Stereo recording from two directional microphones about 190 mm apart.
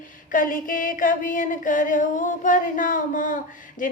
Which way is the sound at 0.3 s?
45° left (ahead or behind).